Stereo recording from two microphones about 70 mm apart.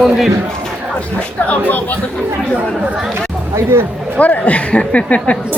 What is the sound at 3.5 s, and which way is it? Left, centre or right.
Speech, right.